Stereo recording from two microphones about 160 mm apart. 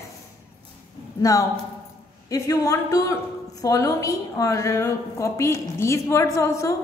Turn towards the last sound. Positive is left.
turn(degrees=20)  # may be behind; listen again after turning